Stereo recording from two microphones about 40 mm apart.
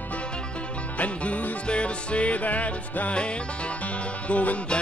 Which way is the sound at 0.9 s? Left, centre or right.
Left.